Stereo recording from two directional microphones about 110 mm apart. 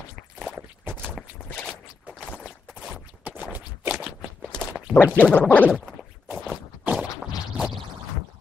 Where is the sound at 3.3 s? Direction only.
15° right (ahead or behind).